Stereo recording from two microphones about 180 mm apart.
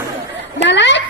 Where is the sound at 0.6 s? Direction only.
80° left.